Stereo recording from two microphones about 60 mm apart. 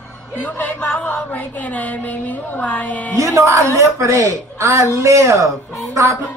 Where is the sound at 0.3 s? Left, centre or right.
Left.